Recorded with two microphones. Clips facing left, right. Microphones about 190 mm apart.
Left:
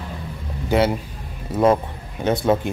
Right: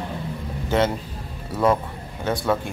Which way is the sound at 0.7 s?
15° left (ahead or behind).